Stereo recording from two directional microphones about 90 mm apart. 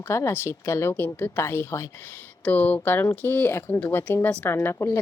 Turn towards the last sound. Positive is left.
turn(degrees=25)  # may be behind; listen again after turning